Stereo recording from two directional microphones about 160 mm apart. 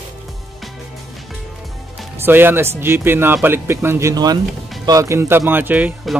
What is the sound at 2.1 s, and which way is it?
Speech, 15° right (ahead or behind).